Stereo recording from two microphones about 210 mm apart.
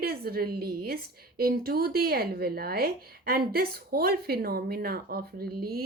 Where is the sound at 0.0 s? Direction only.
45° right (ahead or behind).